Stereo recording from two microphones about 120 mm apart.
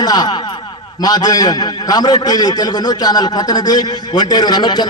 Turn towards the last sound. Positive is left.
turn(degrees=35)  # may be behind; listen again after turning